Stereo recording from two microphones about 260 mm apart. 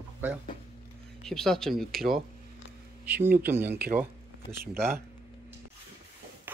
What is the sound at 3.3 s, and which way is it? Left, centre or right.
Speech, centre.